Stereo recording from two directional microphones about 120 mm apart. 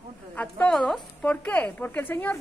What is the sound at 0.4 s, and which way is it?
A woman's voice, 10° left (ahead or behind).